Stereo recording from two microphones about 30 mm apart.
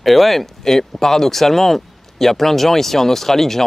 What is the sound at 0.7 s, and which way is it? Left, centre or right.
Speech, centre.